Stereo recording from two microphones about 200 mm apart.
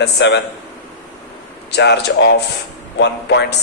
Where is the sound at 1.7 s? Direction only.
55° left (ahead or behind).